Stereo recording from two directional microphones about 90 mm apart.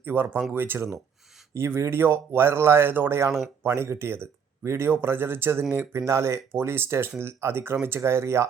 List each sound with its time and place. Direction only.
0.0 s speech: 20° right (ahead or behind)
3.2 s speech: centre (ahead or behind)
3.6 s speech: 25° right (ahead or behind)